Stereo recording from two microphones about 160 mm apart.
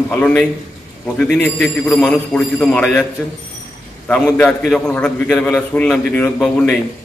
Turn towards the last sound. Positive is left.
turn(degrees=5)  # may be behind; listen again after turning